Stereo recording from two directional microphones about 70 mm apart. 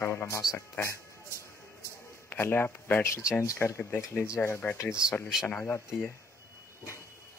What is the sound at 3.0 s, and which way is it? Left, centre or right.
Speech, left.